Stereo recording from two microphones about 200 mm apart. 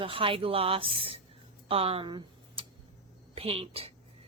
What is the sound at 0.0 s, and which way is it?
A woman's voice, 25° right (ahead or behind).